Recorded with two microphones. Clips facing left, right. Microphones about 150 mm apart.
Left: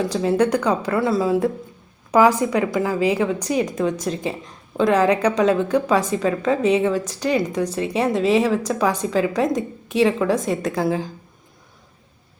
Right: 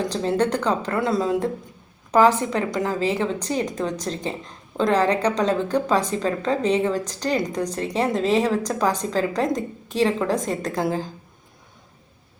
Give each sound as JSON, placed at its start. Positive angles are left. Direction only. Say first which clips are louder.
{"t": 0.1, "sound": "a woman's voice", "louder": "left 3 dB", "side_deg": 10}
{"t": 9.5, "sound": "a woman's voice", "louder": "left 2 dB", "side_deg": -35}
{"t": 10.0, "sound": "a woman's voice", "louder": "left 3 dB", "side_deg": 5}